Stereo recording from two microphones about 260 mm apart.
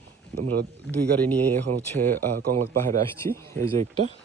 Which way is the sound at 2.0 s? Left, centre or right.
Right.